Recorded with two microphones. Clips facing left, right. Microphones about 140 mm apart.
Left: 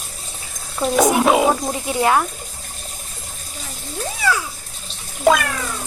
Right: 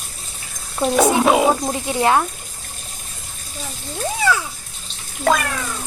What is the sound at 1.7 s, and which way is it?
Speech, 20° right (ahead or behind).